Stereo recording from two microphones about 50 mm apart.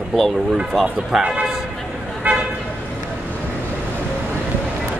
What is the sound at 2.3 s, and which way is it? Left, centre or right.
Toot, right.